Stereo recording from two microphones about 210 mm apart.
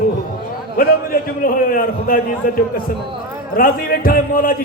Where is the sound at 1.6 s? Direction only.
40° left (ahead or behind).